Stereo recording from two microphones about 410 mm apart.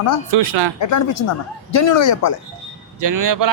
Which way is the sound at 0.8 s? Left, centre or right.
Left.